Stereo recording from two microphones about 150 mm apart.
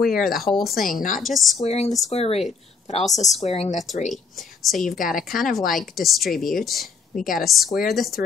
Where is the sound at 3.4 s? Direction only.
45° left (ahead or behind).